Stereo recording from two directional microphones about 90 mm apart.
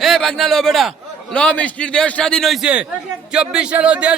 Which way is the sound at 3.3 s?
10° right (ahead or behind).